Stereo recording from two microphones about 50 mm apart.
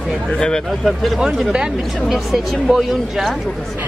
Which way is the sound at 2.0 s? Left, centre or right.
Centre.